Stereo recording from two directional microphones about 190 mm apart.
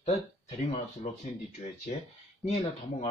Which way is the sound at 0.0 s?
35° left (ahead or behind).